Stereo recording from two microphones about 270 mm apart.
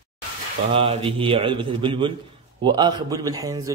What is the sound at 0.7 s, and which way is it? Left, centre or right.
A man's voice, centre.